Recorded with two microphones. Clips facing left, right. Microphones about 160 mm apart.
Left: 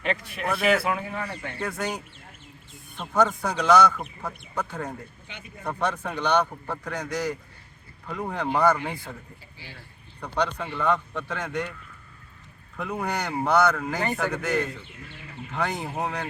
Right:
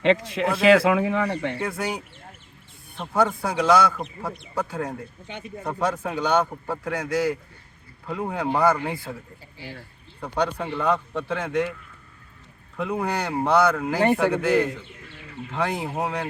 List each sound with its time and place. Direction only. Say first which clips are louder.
0.0 s speech: right 8 dB; 90° right; by 1.5 s 70° right (ahead or behind)
1.5 s a man's voice: right 2 dB; 10° right (ahead or behind)
3.0 s a man's voice: right 1 dB; 10° right (ahead or behind)
10.2 s a man's voice: right 2 dB; 10° right (ahead or behind)
11.1 s speech: right 5 dB; 30° right (ahead or behind)
11.3 s speech: right 6 dB; 5° right (ahead or behind)
12.7 s a man's voice: right 3 dB; 10° right (ahead or behind)